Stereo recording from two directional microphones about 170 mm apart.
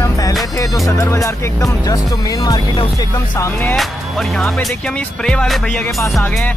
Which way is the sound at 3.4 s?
10° left (ahead or behind).